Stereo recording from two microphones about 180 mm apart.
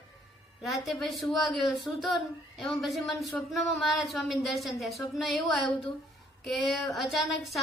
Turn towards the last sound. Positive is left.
turn(degrees=0)  # may be behind; listen again after turning